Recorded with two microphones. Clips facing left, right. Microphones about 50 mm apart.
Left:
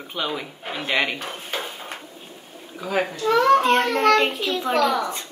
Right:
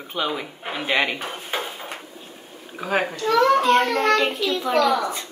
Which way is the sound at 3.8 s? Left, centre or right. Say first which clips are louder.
Left 1 dB; left.